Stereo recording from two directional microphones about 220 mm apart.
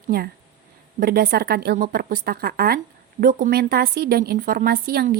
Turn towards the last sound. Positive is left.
turn(degrees=-45)  # may be behind; listen again after turning